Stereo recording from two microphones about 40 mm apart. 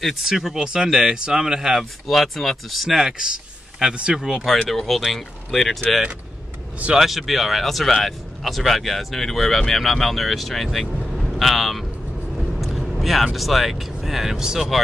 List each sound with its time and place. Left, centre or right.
0.0 s speech: centre
4.6 s speech: centre
7.0 s speech: centre
11.1 s vehicle: centre
14.7 s speech: centre